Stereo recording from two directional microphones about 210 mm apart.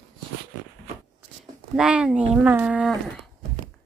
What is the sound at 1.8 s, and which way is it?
Speech, 5° right (ahead or behind).